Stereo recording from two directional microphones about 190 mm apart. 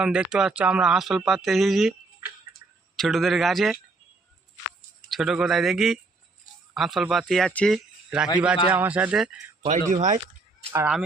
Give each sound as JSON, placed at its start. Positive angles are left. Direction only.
{"t": 0.0, "sound": "speech", "side_deg": -5}
{"t": 5.0, "sound": "speech", "side_deg": 0}
{"t": 9.6, "sound": "speech", "side_deg": -35}
{"t": 10.7, "sound": "speech", "side_deg": -15}